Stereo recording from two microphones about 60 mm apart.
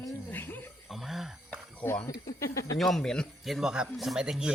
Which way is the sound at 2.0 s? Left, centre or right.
Left.